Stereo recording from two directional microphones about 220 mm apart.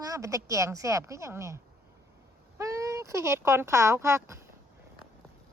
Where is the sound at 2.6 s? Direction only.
15° right (ahead or behind).